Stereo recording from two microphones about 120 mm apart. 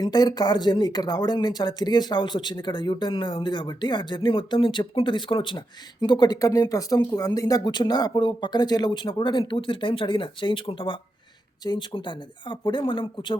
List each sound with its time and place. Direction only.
0.0 s speech: 35° left (ahead or behind)